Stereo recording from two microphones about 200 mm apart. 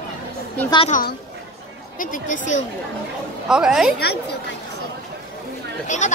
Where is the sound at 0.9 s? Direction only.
45° left (ahead or behind).